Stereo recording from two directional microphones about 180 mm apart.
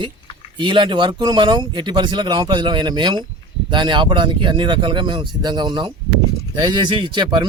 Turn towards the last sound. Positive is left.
turn(degrees=-25)  # may be behind; listen again after turning